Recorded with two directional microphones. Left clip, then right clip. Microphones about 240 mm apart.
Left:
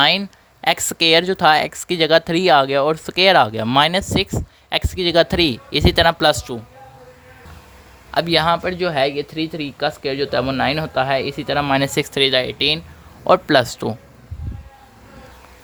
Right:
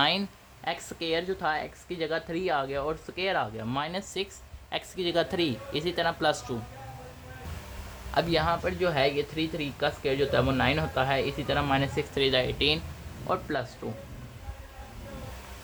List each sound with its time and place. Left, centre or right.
0.6 s speech: left
8.1 s speech: left
13.2 s speech: left